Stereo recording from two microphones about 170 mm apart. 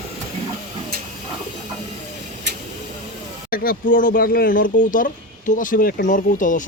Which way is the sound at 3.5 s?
60° left (ahead or behind).